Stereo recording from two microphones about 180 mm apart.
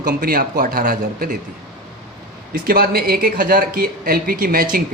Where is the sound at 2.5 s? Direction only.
55° right (ahead or behind).